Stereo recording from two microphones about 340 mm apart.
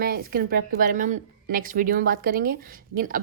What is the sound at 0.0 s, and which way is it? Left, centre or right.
A woman's voice, right.